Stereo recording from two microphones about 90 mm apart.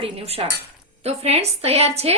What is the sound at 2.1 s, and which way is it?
Speech, 90° right.